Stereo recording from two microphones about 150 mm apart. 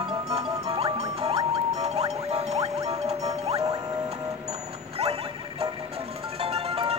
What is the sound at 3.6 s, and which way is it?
Music, 20° right (ahead or behind).